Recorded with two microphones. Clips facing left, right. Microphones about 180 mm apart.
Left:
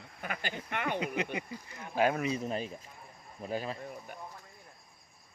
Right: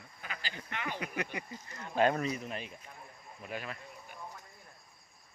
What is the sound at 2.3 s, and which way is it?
Speech, 35° left (ahead or behind).